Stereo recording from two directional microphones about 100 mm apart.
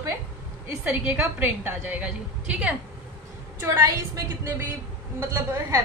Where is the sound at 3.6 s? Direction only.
30° right (ahead or behind).